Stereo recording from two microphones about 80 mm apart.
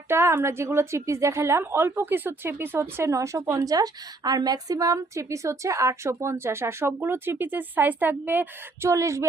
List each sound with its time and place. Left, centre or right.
0.1 s a woman's voice: right
3.7 s a woman's voice: right
8.9 s a woman's voice: right